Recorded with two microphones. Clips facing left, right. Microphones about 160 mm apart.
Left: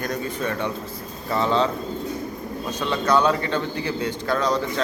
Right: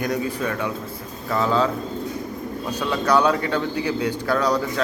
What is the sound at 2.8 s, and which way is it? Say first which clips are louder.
A man's voice: right 1 dB; 10° right (ahead or behind).